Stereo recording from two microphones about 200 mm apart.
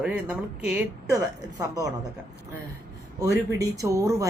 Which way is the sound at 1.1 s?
15° right (ahead or behind).